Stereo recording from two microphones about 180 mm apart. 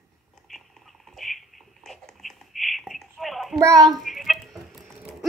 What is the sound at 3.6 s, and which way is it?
Child singing, 20° right (ahead or behind).